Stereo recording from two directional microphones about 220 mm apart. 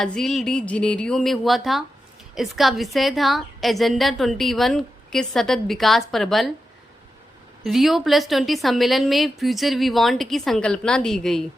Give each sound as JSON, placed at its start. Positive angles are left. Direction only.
{"t": 0.0, "sound": "a woman's voice", "side_deg": 0}
{"t": 7.6, "sound": "a woman's voice", "side_deg": 0}